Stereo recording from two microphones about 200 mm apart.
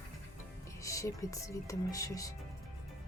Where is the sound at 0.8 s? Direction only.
15° left (ahead or behind).